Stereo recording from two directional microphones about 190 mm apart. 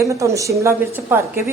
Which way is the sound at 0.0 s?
15° right (ahead or behind).